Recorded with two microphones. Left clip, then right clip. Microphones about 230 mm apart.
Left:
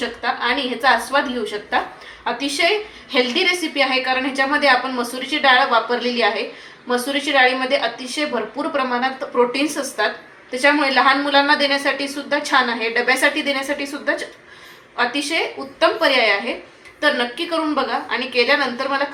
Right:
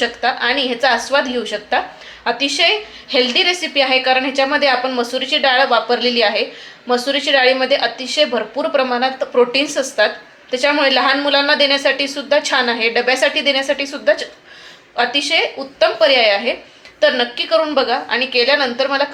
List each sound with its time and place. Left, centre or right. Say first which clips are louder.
0.2 s a woman's voice: right 1 dB; right